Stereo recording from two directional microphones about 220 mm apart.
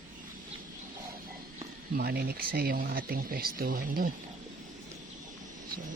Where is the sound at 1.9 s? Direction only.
45° right (ahead or behind).